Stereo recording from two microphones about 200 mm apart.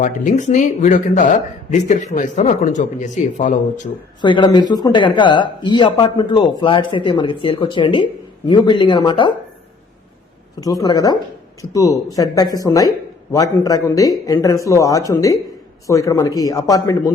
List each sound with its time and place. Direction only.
0.0 s speech: 40° left (ahead or behind)
4.2 s speech: 25° left (ahead or behind)
10.6 s speech: 20° left (ahead or behind)